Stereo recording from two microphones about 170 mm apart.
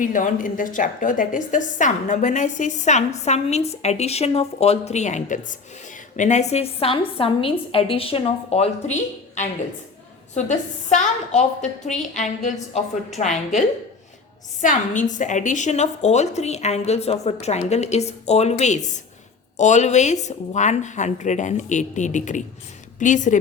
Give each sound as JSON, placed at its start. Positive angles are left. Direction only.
{"t": 0.0, "sound": "a woman's voice", "side_deg": 50}
{"t": 14.6, "sound": "a woman's voice", "side_deg": 50}